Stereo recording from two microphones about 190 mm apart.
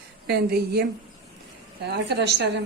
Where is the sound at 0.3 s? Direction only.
60° right (ahead or behind).